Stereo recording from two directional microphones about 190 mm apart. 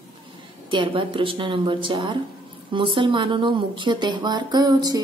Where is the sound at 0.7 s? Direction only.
25° right (ahead or behind).